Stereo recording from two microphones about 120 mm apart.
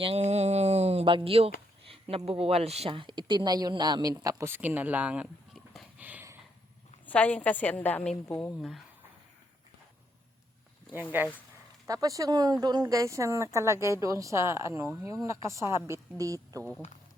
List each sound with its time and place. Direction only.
0.0 s speech: 60° right (ahead or behind); by 5.3 s 10° right (ahead or behind)
6.0 s a sound: 15° right (ahead or behind)
7.0 s a woman's voice: 10° left (ahead or behind)
11.9 s speech: 30° right (ahead or behind)